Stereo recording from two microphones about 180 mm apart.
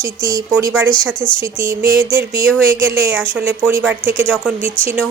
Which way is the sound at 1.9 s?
25° left (ahead or behind).